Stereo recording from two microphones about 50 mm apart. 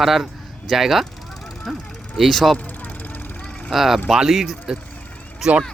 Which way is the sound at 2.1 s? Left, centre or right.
Centre.